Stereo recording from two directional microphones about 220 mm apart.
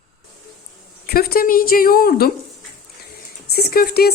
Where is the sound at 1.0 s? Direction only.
45° left (ahead or behind).